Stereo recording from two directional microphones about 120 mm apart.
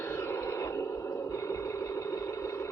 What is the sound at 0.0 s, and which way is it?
Radio, 20° left (ahead or behind).